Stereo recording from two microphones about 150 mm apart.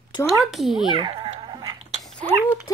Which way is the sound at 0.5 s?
Centre (ahead or behind).